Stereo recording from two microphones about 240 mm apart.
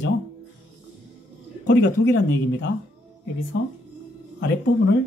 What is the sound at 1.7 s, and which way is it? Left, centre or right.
Speech, left.